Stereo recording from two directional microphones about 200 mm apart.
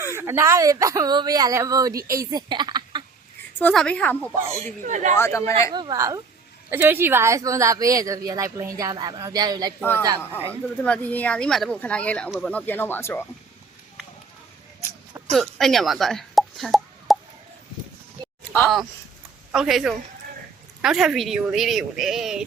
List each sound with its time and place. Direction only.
0.0 s a woman's voice: 10° right (ahead or behind)
3.6 s speech: 5° left (ahead or behind)
4.8 s speech: 40° right (ahead or behind)
5.1 s speech: 15° left (ahead or behind)
5.7 s speech: 20° right (ahead or behind)
10.8 s speech: 5° left (ahead or behind)
15.3 s speech: centre (ahead or behind)
18.5 s a woman's voice: 5° left (ahead or behind)